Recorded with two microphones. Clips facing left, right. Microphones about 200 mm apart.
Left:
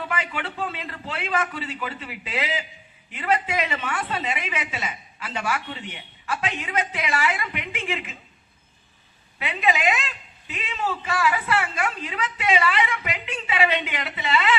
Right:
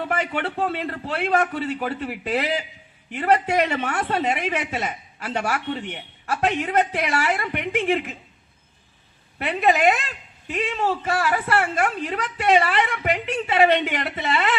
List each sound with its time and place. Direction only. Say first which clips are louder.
0.3 s a woman's voice: right 6 dB; 60° right (ahead or behind)
9.4 s a woman's voice: right 5 dB; 50° right (ahead or behind)
10.8 s a woman's voice: even; 60° right (ahead or behind)